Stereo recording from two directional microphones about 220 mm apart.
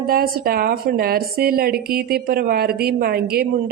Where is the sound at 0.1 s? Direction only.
40° right (ahead or behind).